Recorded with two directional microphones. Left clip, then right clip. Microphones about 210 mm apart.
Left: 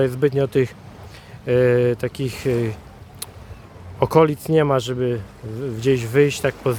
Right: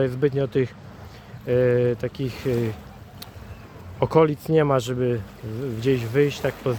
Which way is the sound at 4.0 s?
15° left (ahead or behind).